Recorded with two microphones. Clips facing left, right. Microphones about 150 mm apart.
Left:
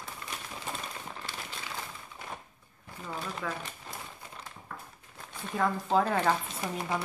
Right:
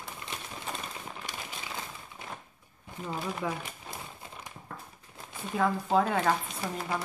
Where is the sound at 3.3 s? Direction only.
15° right (ahead or behind).